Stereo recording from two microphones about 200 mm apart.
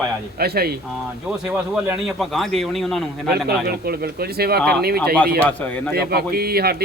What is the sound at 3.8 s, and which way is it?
Speech, 50° right (ahead or behind).